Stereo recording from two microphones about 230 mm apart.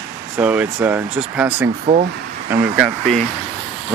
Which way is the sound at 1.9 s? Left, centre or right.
Right.